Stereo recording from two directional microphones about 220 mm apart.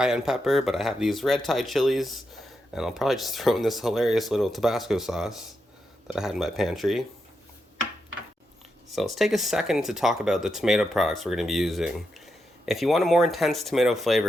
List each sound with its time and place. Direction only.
0.0 s speech: 5° right (ahead or behind)
8.9 s speech: centre (ahead or behind)